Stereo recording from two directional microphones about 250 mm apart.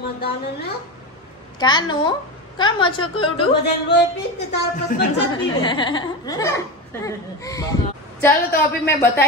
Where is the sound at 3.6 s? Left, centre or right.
Left.